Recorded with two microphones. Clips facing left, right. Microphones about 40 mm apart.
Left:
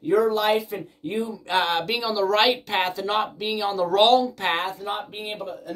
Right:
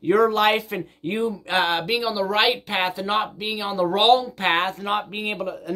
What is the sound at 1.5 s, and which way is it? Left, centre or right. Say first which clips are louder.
Speech: even; right.